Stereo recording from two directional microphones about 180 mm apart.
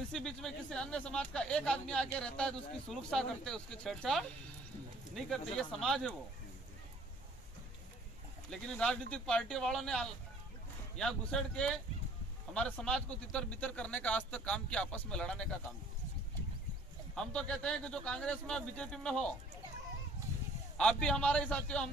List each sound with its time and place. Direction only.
0.1 s speech: 5° left (ahead or behind)
5.6 s speech: centre (ahead or behind)
8.5 s speech: 5° left (ahead or behind)
17.1 s speech: 5° left (ahead or behind)
20.7 s speech: 5° left (ahead or behind)